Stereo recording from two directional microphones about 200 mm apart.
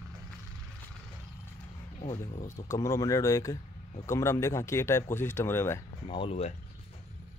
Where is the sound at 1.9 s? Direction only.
35° left (ahead or behind).